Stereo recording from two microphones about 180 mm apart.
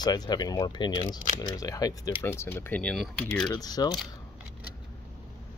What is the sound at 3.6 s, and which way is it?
Speech, 20° left (ahead or behind).